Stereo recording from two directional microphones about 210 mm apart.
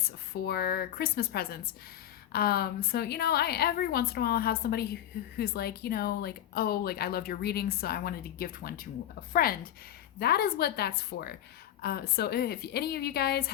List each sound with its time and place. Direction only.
0.4 s speech: 50° left (ahead or behind)